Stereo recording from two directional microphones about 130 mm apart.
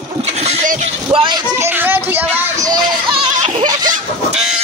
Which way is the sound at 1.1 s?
35° right (ahead or behind).